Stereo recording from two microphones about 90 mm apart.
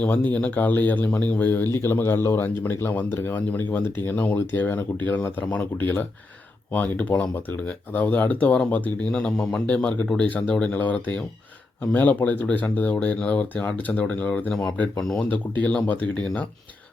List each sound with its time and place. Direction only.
0.0 s speech: 15° left (ahead or behind)
14.9 s speech: 5° left (ahead or behind)
15.6 s speech: 15° left (ahead or behind)